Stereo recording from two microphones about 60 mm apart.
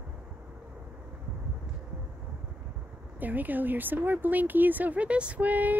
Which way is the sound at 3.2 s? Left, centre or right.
Right.